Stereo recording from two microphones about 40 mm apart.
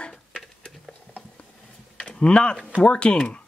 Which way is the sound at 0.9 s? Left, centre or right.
Left.